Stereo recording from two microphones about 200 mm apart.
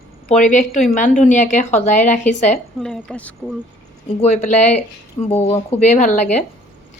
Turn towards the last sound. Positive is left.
turn(degrees=35)  # may be behind; listen again after turning